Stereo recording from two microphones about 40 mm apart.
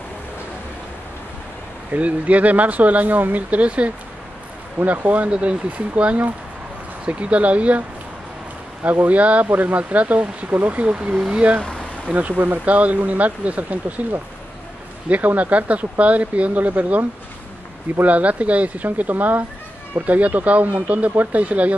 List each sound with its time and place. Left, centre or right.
1.9 s speech: right
4.7 s speech: right
5.3 s speech: right
9.0 s speech: right
12.1 s speech: right
15.0 s speech: right
18.0 s speech: right